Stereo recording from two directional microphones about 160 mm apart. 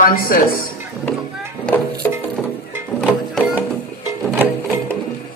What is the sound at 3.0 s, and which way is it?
Music, centre (ahead or behind).